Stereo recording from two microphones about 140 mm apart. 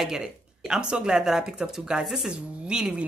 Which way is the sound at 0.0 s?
5° right (ahead or behind).